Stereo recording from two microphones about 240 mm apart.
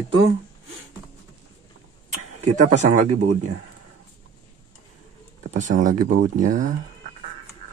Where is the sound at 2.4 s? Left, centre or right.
Right.